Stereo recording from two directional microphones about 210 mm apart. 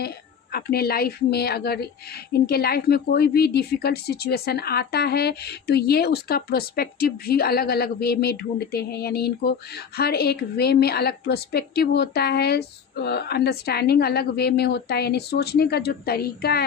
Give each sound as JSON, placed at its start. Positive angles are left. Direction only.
{"t": 0.5, "sound": "a woman's voice", "side_deg": 45}